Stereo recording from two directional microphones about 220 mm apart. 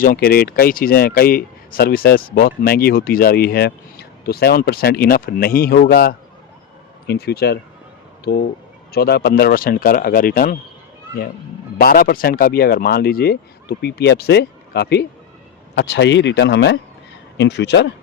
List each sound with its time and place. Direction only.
0.0 s speech: 40° left (ahead or behind)
11.8 s speech: 45° left (ahead or behind)